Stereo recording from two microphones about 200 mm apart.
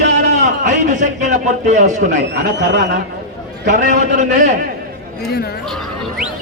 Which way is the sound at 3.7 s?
40° right (ahead or behind).